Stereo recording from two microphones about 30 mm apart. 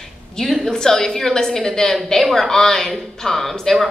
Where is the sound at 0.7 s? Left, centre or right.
Centre.